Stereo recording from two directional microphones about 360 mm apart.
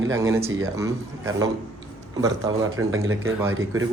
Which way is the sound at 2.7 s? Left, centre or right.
Right.